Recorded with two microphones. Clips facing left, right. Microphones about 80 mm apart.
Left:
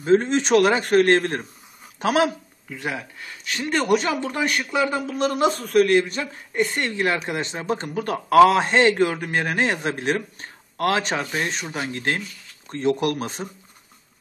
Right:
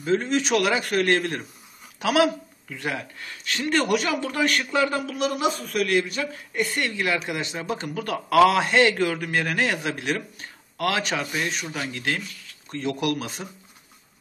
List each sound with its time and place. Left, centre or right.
0.0 s speech: left
2.7 s speech: centre
3.8 s a man's voice: left
5.1 s a man's voice: left